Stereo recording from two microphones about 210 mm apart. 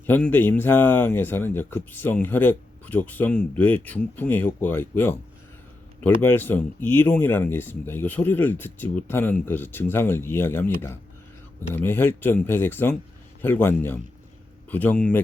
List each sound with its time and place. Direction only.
0.0 s speech: 10° left (ahead or behind)
6.2 s speech: 10° left (ahead or behind)
11.7 s speech: 10° left (ahead or behind)